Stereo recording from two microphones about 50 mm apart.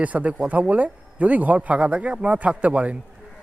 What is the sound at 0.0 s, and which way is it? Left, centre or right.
A man's voice, right.